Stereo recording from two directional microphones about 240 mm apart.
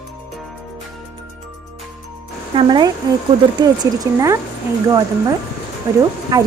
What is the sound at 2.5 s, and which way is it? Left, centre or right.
Speech, centre.